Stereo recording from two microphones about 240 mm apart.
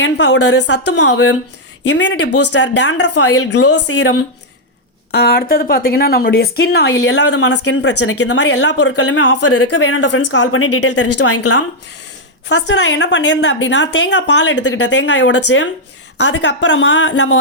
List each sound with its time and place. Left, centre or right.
0.0 s a woman's voice: left
9.4 s speech: left
9.6 s speech: left
12.5 s a woman's voice: left